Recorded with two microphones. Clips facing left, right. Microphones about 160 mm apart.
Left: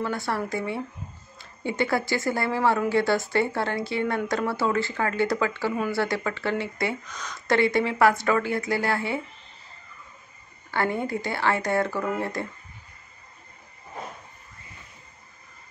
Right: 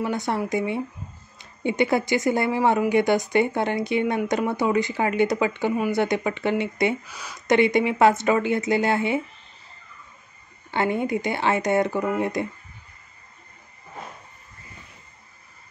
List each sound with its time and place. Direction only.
0.0 s speech: 20° right (ahead or behind)
7.1 s speech: 10° right (ahead or behind)
7.4 s speech: 20° right (ahead or behind)
10.7 s speech: 20° right (ahead or behind)